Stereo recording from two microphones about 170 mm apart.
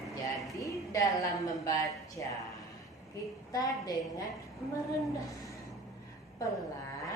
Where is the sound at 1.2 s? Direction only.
20° left (ahead or behind).